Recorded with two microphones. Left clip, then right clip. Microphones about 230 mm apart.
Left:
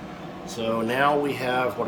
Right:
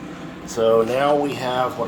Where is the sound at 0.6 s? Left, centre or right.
Right.